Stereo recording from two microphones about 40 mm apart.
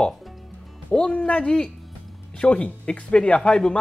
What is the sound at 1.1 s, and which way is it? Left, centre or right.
Speech, left.